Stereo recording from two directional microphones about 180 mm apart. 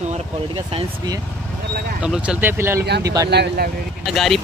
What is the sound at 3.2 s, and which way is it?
Speech, 60° right (ahead or behind).